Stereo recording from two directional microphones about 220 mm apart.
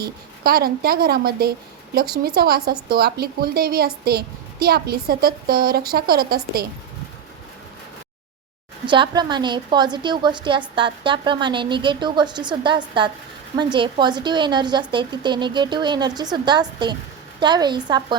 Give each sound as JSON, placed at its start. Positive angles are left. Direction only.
{"t": 0.0, "sound": "a woman's voice", "side_deg": -45}
{"t": 8.9, "sound": "a woman's voice", "side_deg": -20}